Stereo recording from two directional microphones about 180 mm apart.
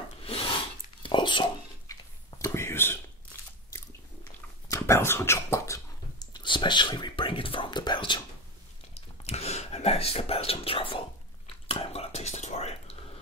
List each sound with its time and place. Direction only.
0.2 s filing: 35° left (ahead or behind)
1.0 s a sound: 25° left (ahead or behind)
9.2 s whispering: 35° left (ahead or behind)